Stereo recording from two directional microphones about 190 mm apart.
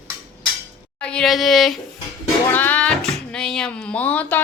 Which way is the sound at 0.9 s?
5° left (ahead or behind).